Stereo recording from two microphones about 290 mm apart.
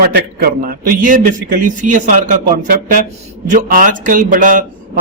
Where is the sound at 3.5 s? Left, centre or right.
Right.